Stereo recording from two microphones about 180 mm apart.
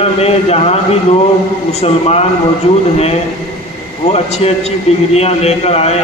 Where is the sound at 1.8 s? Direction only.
35° left (ahead or behind).